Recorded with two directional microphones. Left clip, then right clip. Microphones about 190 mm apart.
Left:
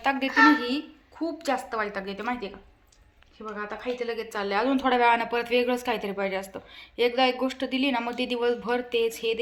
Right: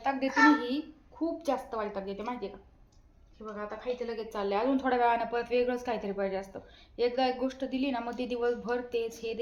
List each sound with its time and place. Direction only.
0.0 s a woman's voice: centre (ahead or behind)
3.5 s a woman's voice: 50° left (ahead or behind)
4.3 s a woman's voice: 10° left (ahead or behind)